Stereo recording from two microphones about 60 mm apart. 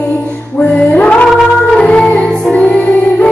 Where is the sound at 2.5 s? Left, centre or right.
Left.